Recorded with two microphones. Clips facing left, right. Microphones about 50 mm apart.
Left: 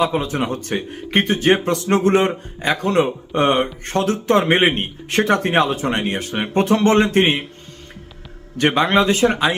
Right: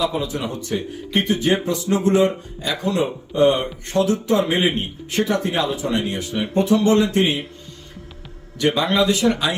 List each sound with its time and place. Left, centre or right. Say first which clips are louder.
0.0 s speech: left 3 dB; left
8.5 s speech: left 3 dB; left